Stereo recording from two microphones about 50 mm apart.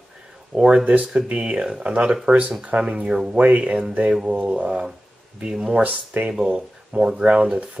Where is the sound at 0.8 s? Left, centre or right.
Right.